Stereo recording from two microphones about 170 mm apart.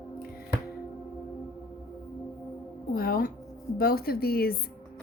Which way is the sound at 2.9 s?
60° left (ahead or behind).